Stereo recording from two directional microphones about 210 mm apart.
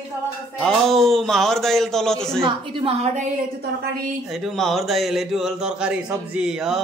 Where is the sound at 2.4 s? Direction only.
25° right (ahead or behind).